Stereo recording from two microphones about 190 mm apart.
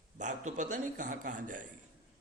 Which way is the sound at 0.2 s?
40° right (ahead or behind).